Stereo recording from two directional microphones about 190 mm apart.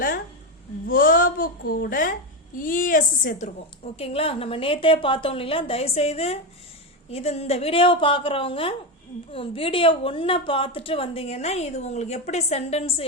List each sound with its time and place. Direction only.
0.9 s a woman's voice: 50° left (ahead or behind)
3.9 s a woman's voice: 30° left (ahead or behind)